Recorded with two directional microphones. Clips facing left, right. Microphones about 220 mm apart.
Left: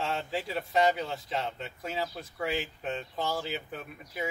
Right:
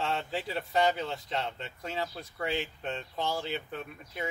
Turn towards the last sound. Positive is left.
turn(degrees=5)  # may be behind; listen again after turning